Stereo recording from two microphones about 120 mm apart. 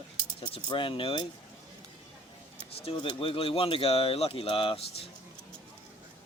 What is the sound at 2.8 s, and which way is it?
Speech, 45° left (ahead or behind).